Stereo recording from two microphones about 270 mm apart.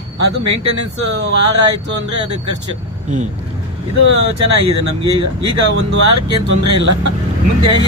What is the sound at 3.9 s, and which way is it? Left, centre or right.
A man's voice, right.